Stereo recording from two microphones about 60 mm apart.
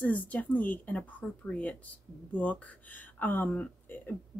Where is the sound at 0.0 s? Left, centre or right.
Left.